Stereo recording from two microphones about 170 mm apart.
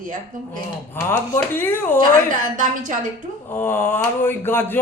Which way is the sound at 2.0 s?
50° right (ahead or behind).